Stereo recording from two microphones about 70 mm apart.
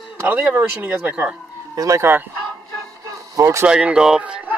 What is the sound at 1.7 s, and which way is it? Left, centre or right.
Speech, right.